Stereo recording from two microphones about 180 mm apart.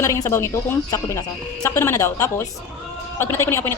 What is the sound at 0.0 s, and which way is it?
A woman's voice, 15° left (ahead or behind).